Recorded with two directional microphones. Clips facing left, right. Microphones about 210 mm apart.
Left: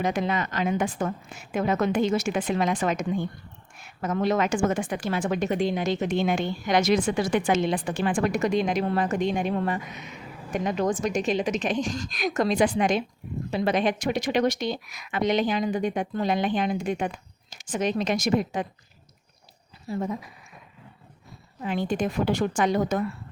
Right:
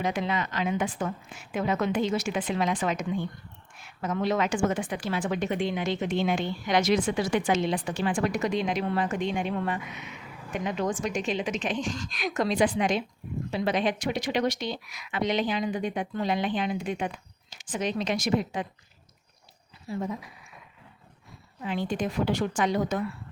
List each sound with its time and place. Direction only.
0.0 s a woman's voice: 45° left (ahead or behind)
19.9 s a woman's voice: 40° left (ahead or behind)
21.6 s a woman's voice: 45° left (ahead or behind)